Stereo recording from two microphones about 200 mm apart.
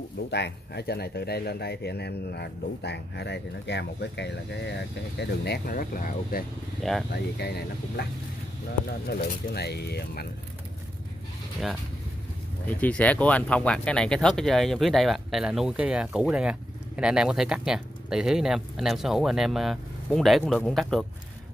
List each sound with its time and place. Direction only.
0.3 s speech: 55° left (ahead or behind)
6.8 s speech: centre (ahead or behind)
7.1 s speech: 55° left (ahead or behind)
12.6 s speech: 5° left (ahead or behind)